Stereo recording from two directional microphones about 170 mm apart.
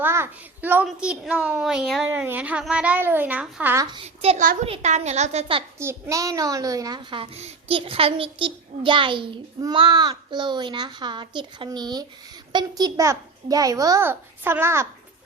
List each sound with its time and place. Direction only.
0.0 s a woman's voice: 15° right (ahead or behind)
3.9 s a woman's voice: 35° right (ahead or behind)
5.8 s a child's voice: 15° right (ahead or behind)